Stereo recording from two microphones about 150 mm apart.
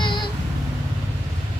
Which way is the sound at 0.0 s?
30° left (ahead or behind).